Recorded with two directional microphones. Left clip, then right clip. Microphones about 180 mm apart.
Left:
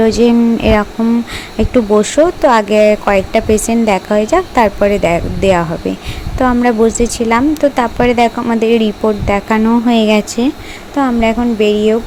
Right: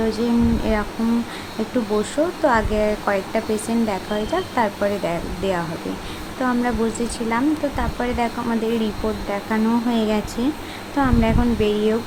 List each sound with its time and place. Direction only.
0.0 s speech: 40° left (ahead or behind)
2.0 s speech: 40° left (ahead or behind)